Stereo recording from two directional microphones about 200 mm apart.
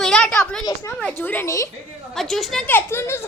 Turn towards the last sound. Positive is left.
turn(degrees=10)  # may be behind; listen again after turning